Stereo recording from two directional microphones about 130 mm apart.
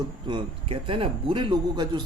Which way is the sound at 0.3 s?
40° right (ahead or behind).